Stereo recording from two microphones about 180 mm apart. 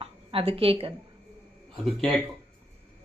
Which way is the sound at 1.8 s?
Centre (ahead or behind).